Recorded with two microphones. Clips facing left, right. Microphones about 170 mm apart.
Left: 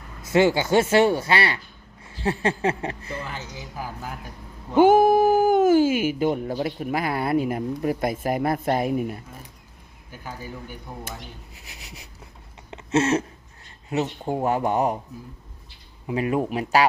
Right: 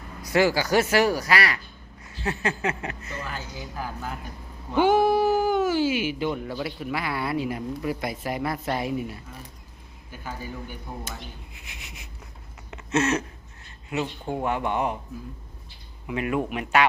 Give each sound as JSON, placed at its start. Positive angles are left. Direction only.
{"t": 0.2, "sound": "a woman's voice", "side_deg": 25}
{"t": 4.8, "sound": "speech", "side_deg": 50}
{"t": 11.5, "sound": "speech", "side_deg": 40}
{"t": 12.7, "sound": "a sound", "side_deg": 30}
{"t": 13.9, "sound": "a woman's voice", "side_deg": 40}
{"t": 16.0, "sound": "a woman's voice", "side_deg": 30}